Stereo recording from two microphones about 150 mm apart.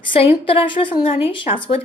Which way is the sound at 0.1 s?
40° left (ahead or behind).